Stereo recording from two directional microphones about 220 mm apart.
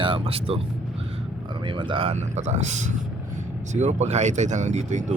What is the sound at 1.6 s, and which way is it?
Speech, 20° right (ahead or behind).